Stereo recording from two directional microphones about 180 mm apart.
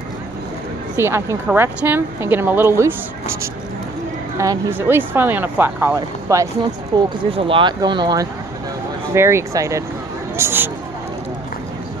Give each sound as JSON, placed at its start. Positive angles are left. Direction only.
{"t": 1.0, "sound": "speech", "side_deg": -15}
{"t": 4.4, "sound": "speech", "side_deg": -15}
{"t": 7.0, "sound": "speech", "side_deg": -30}